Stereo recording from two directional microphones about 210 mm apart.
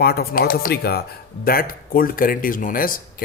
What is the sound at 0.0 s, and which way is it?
Speech, 45° left (ahead or behind).